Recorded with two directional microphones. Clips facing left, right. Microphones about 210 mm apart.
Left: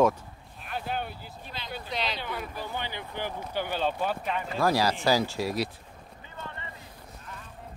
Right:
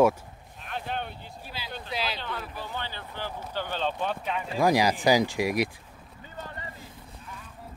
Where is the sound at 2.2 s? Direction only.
10° left (ahead or behind).